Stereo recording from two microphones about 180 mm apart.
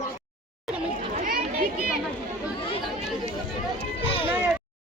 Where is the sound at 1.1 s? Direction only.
50° right (ahead or behind).